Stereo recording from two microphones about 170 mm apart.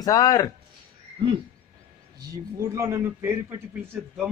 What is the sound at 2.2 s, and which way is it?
Speech, 15° right (ahead or behind).